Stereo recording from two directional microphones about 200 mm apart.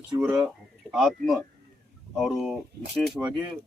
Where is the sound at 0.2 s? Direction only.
5° right (ahead or behind).